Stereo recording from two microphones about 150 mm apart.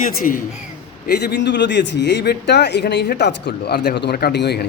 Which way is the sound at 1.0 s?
90° left.